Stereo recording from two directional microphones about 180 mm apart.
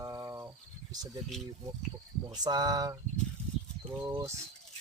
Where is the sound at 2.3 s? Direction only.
20° right (ahead or behind).